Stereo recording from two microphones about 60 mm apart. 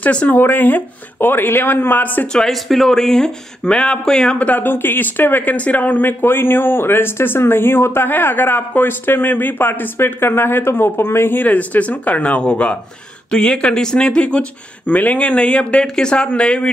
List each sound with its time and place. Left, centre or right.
0.0 s speech: left
0.4 s speech: left
2.3 s speech: centre